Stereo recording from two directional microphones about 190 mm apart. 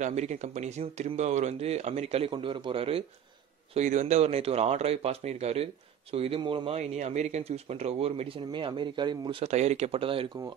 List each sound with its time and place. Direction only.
0.0 s a man's voice: 35° right (ahead or behind)
3.7 s a man's voice: 40° right (ahead or behind)